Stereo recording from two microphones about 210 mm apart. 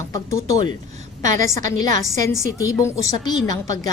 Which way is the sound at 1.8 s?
15° left (ahead or behind).